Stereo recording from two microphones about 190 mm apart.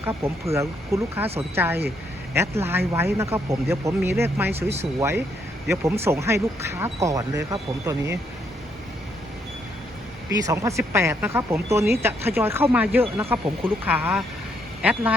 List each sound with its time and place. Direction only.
0.0 s speech: 15° right (ahead or behind)
10.4 s speech: 15° right (ahead or behind)